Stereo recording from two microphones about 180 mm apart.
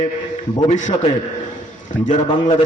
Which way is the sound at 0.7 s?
40° left (ahead or behind).